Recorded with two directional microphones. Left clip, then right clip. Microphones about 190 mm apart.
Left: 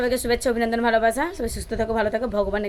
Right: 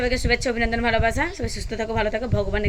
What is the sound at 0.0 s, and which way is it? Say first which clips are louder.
A woman's voice: even; 15° left (ahead or behind).